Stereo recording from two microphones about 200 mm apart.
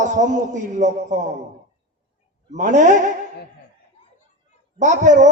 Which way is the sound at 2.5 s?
40° right (ahead or behind).